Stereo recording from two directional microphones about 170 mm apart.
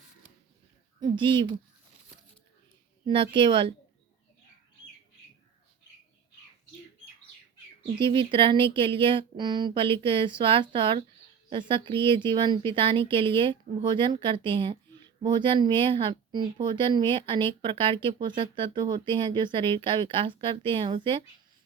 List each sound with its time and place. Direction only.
1.0 s speech: 30° right (ahead or behind)
3.1 s speech: 30° right (ahead or behind)
7.9 s speech: 30° right (ahead or behind)